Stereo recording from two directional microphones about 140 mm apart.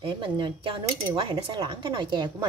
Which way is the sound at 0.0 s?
35° right (ahead or behind).